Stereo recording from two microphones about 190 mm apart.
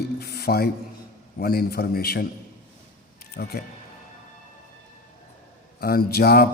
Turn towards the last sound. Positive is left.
turn(degrees=55)  # may be behind; listen again after turning